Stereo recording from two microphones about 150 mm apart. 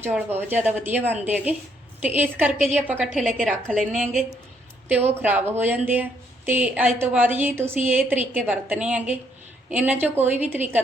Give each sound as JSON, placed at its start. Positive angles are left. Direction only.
{"t": 0.0, "sound": "speech", "side_deg": -15}
{"t": 3.1, "sound": "a woman's voice", "side_deg": 0}
{"t": 3.9, "sound": "speech", "side_deg": -55}
{"t": 5.2, "sound": "speech", "side_deg": -15}